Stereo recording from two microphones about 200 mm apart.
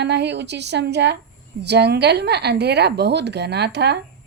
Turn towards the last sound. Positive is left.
turn(degrees=-55)  # may be behind; listen again after turning